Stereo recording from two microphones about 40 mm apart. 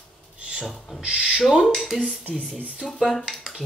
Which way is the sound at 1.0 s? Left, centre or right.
Right.